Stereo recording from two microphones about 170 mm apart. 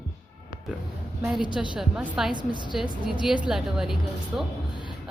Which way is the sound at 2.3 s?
25° right (ahead or behind).